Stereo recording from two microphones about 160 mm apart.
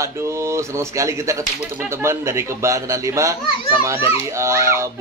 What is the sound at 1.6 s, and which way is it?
A man's voice, 10° right (ahead or behind).